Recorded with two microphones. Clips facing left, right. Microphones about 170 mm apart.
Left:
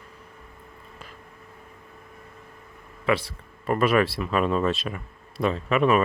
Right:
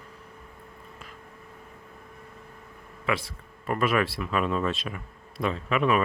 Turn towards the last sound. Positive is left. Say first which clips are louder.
# left 3 dB
turn(degrees=40)  # may be behind; listen again after turning